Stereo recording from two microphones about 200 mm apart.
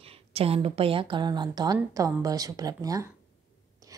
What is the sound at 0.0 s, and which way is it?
A woman's voice, 30° right (ahead or behind).